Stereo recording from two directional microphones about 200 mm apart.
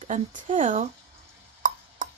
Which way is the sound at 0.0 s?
40° right (ahead or behind).